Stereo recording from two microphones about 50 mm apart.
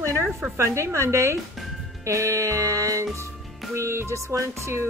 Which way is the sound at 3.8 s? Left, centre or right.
Right.